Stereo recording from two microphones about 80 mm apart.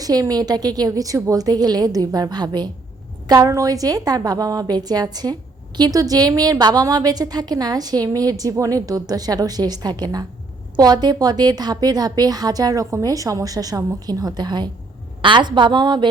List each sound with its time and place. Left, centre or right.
0.0 s a woman's voice: right
3.2 s a woman's voice: right
15.2 s a woman's voice: right